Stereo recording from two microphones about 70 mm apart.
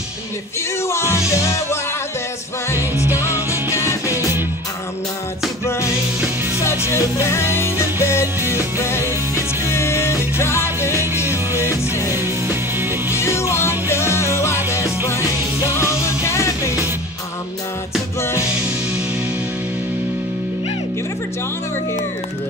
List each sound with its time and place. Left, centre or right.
0.7 s music: left
3.3 s music: right
3.7 s music: left
6.9 s music: left
11.2 s music: right
11.9 s music: left
12.2 s music: right
13.1 s music: left